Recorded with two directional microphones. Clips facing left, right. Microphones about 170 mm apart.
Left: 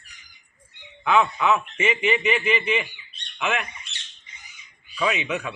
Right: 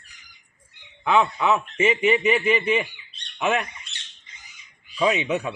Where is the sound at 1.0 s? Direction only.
30° right (ahead or behind).